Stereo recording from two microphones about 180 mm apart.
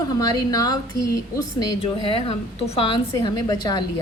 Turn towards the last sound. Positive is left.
turn(degrees=20)  # may be behind; listen again after turning